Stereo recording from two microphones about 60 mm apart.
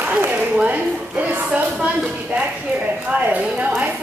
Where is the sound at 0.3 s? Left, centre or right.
Right.